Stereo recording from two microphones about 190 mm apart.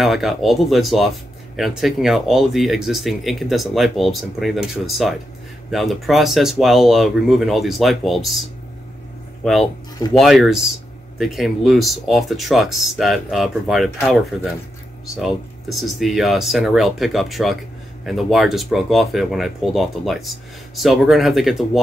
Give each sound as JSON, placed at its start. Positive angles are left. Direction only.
{"t": 0.0, "sound": "speech", "side_deg": 0}
{"t": 9.4, "sound": "speech", "side_deg": 0}